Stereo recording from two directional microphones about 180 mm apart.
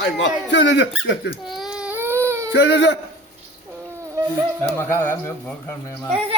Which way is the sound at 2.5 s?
80° left.